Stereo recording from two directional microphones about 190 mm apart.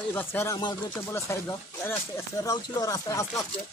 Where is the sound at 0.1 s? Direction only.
10° left (ahead or behind).